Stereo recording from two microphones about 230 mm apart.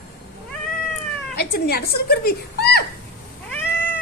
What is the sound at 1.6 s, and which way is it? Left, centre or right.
A woman's voice, left.